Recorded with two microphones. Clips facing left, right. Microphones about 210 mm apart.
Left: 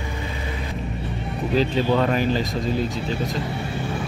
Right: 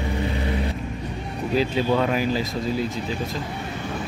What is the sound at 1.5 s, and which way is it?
Speech, 5° right (ahead or behind).